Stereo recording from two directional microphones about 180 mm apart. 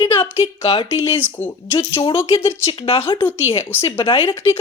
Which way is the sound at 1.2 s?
10° left (ahead or behind).